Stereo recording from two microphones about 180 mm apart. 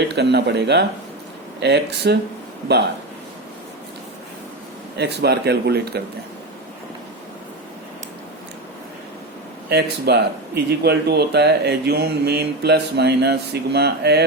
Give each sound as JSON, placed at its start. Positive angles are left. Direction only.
{"t": 0.2, "sound": "speech", "side_deg": -70}
{"t": 4.9, "sound": "speech", "side_deg": -70}
{"t": 9.6, "sound": "speech", "side_deg": -65}